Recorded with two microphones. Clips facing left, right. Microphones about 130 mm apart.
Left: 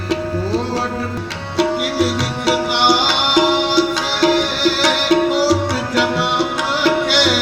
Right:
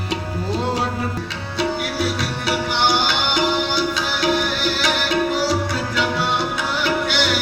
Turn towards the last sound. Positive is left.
turn(degrees=85)